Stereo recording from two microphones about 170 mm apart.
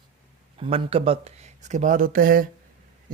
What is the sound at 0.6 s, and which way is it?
Speech, 35° right (ahead or behind).